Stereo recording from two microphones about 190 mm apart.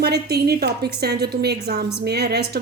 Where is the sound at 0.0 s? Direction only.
55° right (ahead or behind).